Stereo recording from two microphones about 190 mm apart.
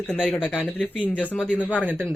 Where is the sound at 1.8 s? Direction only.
10° right (ahead or behind).